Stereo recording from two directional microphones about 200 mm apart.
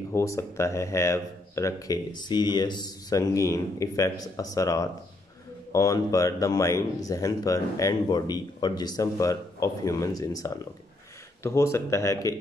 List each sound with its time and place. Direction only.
0.1 s speech: 15° left (ahead or behind)